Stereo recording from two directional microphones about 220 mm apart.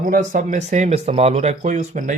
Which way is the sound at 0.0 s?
35° right (ahead or behind).